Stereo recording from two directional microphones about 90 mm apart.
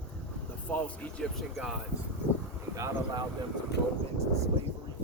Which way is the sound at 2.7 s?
35° right (ahead or behind).